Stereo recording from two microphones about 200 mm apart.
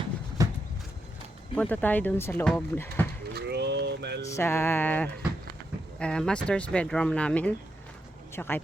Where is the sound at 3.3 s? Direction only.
55° right (ahead or behind).